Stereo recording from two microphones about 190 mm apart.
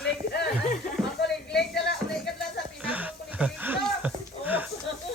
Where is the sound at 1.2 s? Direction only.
60° left (ahead or behind).